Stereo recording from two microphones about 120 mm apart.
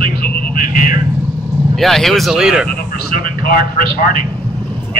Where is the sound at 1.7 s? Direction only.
Centre (ahead or behind).